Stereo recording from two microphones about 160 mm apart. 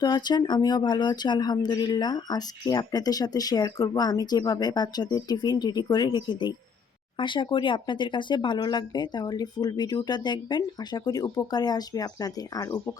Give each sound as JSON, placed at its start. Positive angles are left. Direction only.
{"t": 0.0, "sound": "speech", "side_deg": 25}